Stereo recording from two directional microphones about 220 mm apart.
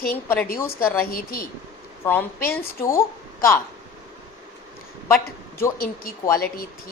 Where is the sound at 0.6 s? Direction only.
10° left (ahead or behind).